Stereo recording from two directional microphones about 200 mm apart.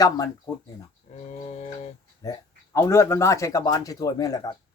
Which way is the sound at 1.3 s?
35° left (ahead or behind).